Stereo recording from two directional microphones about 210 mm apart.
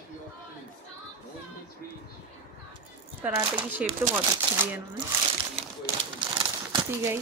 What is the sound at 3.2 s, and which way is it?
Speech, 10° right (ahead or behind).